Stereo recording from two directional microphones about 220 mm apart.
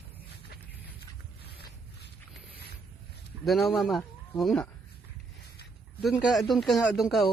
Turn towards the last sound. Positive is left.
turn(degrees=0)  # may be behind; listen again after turning